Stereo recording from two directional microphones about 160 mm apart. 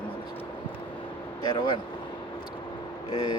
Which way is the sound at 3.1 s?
25° left (ahead or behind).